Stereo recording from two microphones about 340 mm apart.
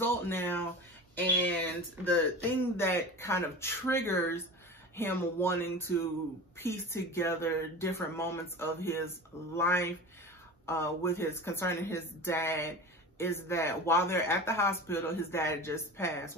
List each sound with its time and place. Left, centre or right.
0.0 s speech: centre